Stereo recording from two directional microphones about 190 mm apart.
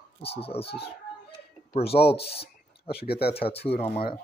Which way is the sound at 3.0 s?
55° left (ahead or behind).